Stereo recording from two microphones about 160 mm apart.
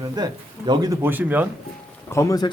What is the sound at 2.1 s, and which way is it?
Speech, 20° left (ahead or behind).